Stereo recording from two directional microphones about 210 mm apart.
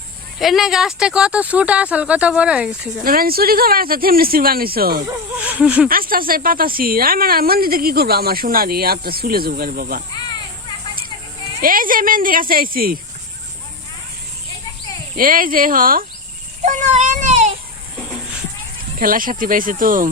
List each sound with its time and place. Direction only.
0.3 s speech: centre (ahead or behind)
3.0 s speech: 45° right (ahead or behind)
5.0 s speech: 5° right (ahead or behind)
5.9 s speech: 45° right (ahead or behind)
11.6 s speech: 40° right (ahead or behind)
15.1 s speech: 40° right (ahead or behind)
16.6 s child singing: 35° right (ahead or behind)
18.9 s speech: 40° right (ahead or behind)